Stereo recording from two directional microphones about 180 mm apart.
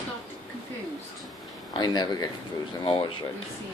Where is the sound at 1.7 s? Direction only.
25° left (ahead or behind).